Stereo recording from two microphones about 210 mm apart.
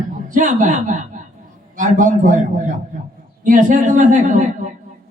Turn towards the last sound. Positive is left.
turn(degrees=-35)  # may be behind; listen again after turning